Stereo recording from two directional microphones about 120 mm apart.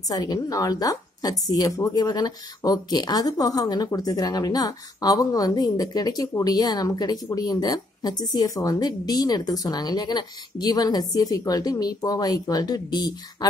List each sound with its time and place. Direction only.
0.1 s a woman's voice: 30° left (ahead or behind)